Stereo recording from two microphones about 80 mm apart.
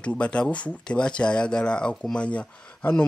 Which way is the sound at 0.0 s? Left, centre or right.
Centre.